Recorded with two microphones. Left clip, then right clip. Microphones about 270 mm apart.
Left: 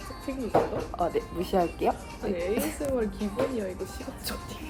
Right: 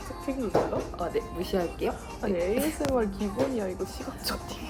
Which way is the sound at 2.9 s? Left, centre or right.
Centre.